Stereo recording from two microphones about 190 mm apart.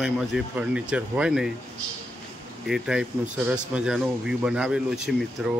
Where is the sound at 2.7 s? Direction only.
5° right (ahead or behind).